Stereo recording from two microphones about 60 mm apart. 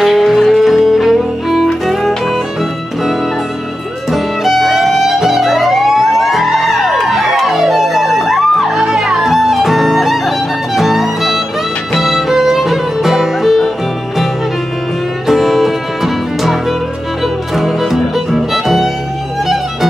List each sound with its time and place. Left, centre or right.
0.0 s music: centre
4.1 s music: centre
15.2 s music: centre
17.6 s music: centre